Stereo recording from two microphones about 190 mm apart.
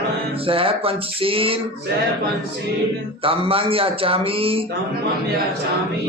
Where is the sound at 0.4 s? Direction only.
30° right (ahead or behind).